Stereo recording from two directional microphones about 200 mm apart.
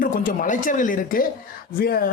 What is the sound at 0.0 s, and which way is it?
Speech, 45° left (ahead or behind).